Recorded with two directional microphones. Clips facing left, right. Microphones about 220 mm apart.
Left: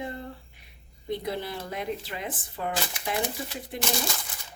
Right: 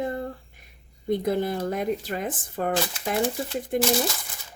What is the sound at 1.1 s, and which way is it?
Speech, 45° right (ahead or behind).